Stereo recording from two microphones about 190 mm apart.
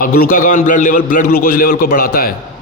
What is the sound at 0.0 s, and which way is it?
A man's voice, 45° left (ahead or behind).